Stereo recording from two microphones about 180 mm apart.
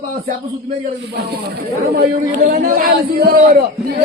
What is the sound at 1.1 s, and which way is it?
A man's voice, 60° right (ahead or behind).